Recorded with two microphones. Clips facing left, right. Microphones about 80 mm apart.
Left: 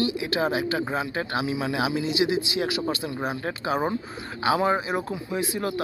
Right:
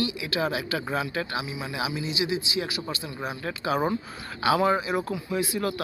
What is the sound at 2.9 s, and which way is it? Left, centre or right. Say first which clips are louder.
Speech: left 5 dB; left.